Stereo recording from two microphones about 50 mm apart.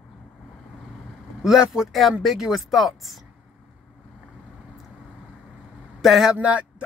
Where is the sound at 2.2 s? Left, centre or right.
Centre.